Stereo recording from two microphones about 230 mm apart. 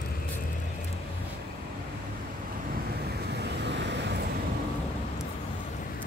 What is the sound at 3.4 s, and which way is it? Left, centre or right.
Vehicle, right.